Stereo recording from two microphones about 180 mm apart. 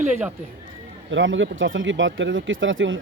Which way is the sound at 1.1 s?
90° right.